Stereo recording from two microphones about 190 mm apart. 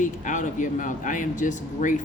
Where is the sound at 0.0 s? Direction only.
40° left (ahead or behind).